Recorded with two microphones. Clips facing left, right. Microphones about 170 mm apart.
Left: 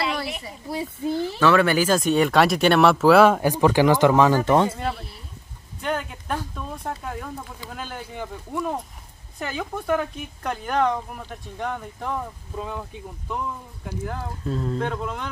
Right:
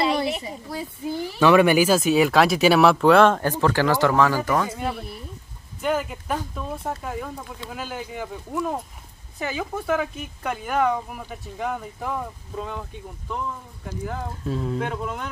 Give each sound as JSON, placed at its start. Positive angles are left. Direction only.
{"t": 0.0, "sound": "a sound", "side_deg": -30}
{"t": 0.7, "sound": "speech", "side_deg": 25}
{"t": 1.1, "sound": "speech", "side_deg": -15}
{"t": 5.8, "sound": "speech", "side_deg": -5}
{"t": 14.0, "sound": "speech", "side_deg": 0}